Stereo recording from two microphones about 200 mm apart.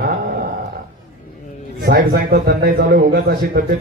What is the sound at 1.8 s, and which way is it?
A man's voice, 50° right (ahead or behind).